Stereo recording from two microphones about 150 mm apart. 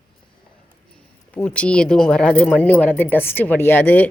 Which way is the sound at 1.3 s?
10° left (ahead or behind).